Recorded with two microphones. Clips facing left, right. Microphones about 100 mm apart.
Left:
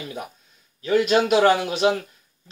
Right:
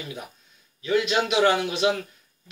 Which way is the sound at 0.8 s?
45° left (ahead or behind).